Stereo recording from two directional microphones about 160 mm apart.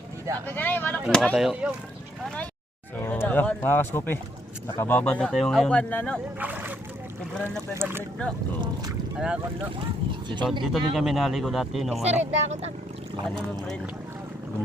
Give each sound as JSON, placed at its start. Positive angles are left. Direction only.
{"t": 0.4, "sound": "speech", "side_deg": 10}
{"t": 3.0, "sound": "speech", "side_deg": 10}
{"t": 6.4, "sound": "speech", "side_deg": -10}
{"t": 9.1, "sound": "speech", "side_deg": -5}
{"t": 10.1, "sound": "speech", "side_deg": -30}
{"t": 10.6, "sound": "speech", "side_deg": 0}
{"t": 12.0, "sound": "speech", "side_deg": -45}